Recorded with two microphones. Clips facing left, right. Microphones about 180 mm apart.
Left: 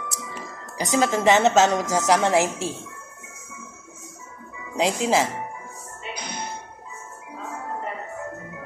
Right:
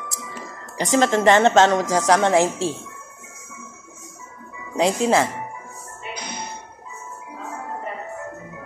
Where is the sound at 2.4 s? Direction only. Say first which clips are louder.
Right 3 dB; 30° right (ahead or behind).